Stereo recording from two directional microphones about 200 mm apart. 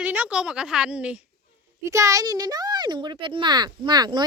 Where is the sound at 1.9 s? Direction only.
15° right (ahead or behind).